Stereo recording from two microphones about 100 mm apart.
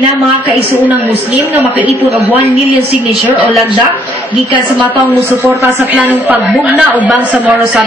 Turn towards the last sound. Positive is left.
turn(degrees=-15)  # may be behind; listen again after turning